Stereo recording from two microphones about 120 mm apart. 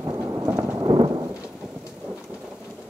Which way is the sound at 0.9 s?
50° right (ahead or behind).